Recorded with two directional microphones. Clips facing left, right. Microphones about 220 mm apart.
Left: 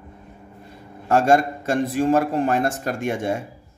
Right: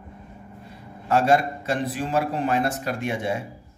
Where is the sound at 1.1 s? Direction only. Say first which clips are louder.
Left 3 dB; 45° left (ahead or behind).